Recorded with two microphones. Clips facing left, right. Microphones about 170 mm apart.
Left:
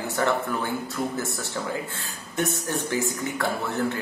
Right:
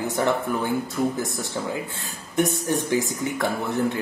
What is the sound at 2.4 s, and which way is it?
Speech, 15° right (ahead or behind).